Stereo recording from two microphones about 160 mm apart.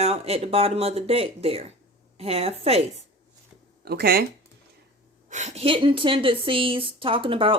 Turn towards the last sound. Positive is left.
turn(degrees=-35)  # may be behind; listen again after turning